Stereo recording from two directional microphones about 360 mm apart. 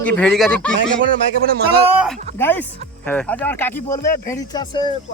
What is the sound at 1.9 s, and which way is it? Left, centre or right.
Speech, centre.